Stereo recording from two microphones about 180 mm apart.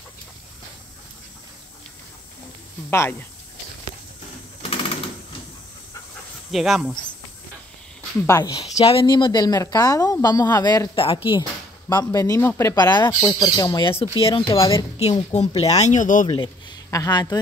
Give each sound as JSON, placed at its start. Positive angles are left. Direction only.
{"t": 2.9, "sound": "a woman's voice", "side_deg": 10}
{"t": 6.5, "sound": "speech", "side_deg": 0}
{"t": 8.3, "sound": "a woman's voice", "side_deg": 15}
{"t": 8.5, "sound": "a woman's voice", "side_deg": 35}
{"t": 14.5, "sound": "a woman's voice", "side_deg": 15}
{"t": 15.0, "sound": "speech", "side_deg": 30}
{"t": 16.3, "sound": "speech", "side_deg": 25}